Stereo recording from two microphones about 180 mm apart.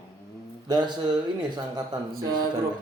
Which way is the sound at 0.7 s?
25° right (ahead or behind).